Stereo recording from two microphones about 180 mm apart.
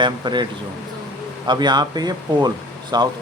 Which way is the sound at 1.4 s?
25° right (ahead or behind).